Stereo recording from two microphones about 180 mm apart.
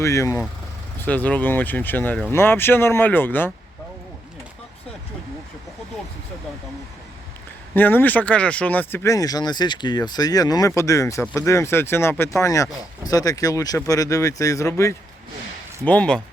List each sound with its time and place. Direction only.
0.0 s speech: 15° left (ahead or behind)
7.7 s speech: 10° left (ahead or behind)
15.8 s speech: 5° left (ahead or behind)